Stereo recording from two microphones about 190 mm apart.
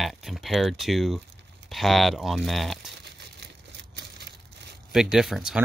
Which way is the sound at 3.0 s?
60° right (ahead or behind).